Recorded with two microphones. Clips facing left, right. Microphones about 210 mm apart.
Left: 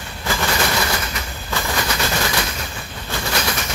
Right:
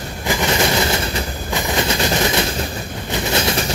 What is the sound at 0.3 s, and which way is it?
Train, 20° right (ahead or behind).